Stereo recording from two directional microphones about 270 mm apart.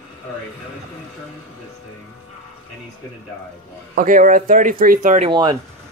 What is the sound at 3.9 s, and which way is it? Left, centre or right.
Speech, right.